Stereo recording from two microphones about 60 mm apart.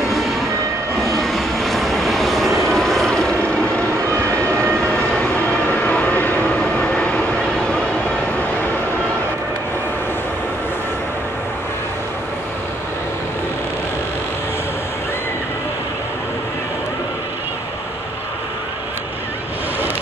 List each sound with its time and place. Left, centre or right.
1.0 s vehicle: centre
5.2 s vehicle: left
6.6 s vehicle: centre